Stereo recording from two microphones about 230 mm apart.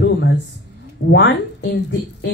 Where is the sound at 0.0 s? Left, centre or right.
Left.